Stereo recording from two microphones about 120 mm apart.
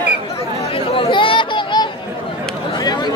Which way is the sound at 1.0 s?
45° left (ahead or behind).